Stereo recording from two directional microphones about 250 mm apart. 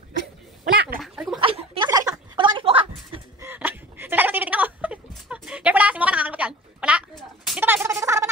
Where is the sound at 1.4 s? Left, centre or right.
Right.